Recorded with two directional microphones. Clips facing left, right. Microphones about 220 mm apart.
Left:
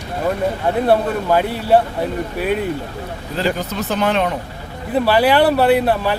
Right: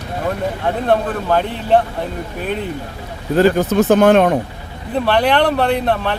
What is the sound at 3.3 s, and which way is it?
Speech, 50° right (ahead or behind).